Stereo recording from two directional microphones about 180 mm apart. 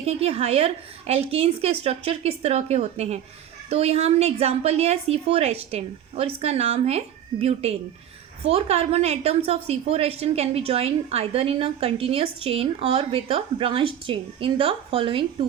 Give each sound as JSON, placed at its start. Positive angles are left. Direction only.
{"t": 0.0, "sound": "a woman's voice", "side_deg": -35}